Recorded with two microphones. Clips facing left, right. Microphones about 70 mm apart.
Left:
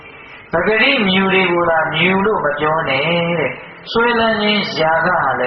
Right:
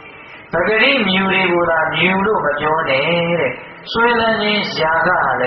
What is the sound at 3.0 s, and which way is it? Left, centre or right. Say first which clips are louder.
Speech: even; right.